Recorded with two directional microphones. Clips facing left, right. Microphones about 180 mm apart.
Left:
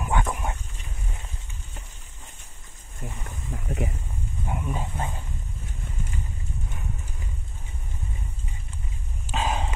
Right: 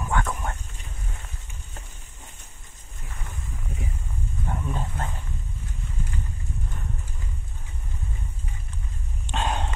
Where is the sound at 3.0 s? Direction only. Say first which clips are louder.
Left 4 dB; 55° left (ahead or behind).